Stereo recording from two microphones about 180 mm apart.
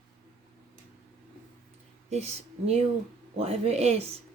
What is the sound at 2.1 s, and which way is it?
Speech, 35° right (ahead or behind).